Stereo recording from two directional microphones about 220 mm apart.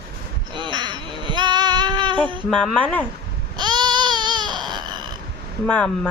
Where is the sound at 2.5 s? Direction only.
5° left (ahead or behind).